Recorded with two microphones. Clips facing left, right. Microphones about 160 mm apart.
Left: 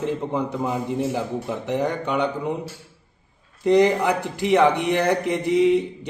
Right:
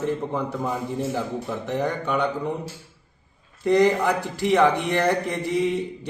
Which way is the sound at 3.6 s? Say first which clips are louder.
Left 2 dB; 15° left (ahead or behind).